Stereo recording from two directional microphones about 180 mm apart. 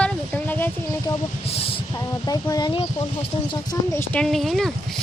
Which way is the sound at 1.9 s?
20° left (ahead or behind).